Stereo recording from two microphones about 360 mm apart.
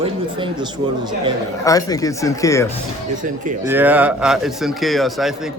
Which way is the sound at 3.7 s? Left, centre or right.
Centre.